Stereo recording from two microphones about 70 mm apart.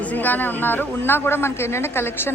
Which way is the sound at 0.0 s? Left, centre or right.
Left.